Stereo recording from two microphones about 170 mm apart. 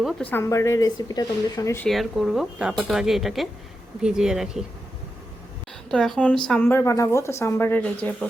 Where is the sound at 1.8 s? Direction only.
Centre (ahead or behind).